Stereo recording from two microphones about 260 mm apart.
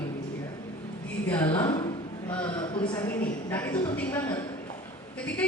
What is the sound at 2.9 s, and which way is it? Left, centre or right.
A woman's voice, centre.